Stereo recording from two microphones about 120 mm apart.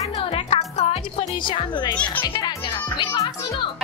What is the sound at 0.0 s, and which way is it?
Music, 50° left (ahead or behind).